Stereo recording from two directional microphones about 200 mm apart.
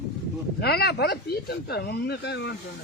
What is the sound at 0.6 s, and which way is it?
Speech, 55° left (ahead or behind).